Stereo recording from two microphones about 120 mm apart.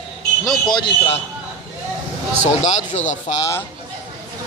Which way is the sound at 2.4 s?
75° left (ahead or behind).